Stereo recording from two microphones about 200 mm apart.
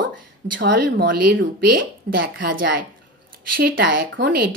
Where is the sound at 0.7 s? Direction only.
45° right (ahead or behind).